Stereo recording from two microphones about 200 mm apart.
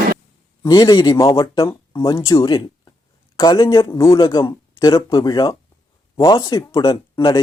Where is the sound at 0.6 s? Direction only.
20° left (ahead or behind).